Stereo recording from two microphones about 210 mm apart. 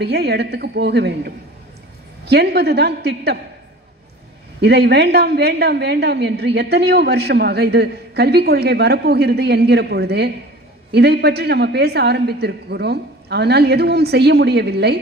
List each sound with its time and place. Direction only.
0.0 s a woman's voice: 55° right (ahead or behind)
4.6 s a woman's voice: 55° right (ahead or behind)